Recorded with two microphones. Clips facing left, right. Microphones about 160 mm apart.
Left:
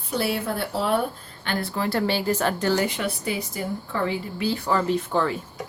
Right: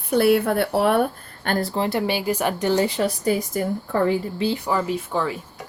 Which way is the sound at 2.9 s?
35° right (ahead or behind).